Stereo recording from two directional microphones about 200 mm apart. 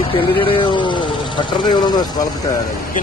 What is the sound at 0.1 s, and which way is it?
Speech, 25° left (ahead or behind).